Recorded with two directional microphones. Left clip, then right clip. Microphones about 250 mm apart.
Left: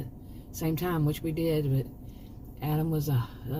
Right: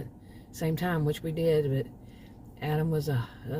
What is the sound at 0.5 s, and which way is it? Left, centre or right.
Speech, right.